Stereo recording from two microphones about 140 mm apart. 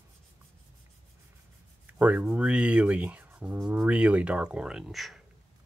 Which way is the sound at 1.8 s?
10° right (ahead or behind).